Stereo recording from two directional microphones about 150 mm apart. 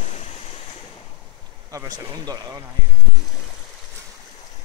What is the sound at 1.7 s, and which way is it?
Speech, 25° right (ahead or behind).